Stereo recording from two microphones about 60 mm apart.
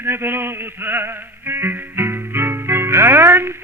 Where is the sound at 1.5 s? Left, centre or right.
Right.